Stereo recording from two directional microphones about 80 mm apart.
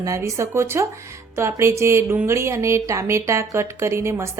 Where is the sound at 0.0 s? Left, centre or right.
Right.